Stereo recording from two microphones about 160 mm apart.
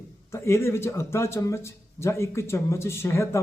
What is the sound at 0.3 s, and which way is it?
Speech, 15° left (ahead or behind).